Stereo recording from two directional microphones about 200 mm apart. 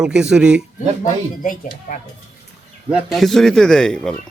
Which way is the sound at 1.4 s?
40° left (ahead or behind).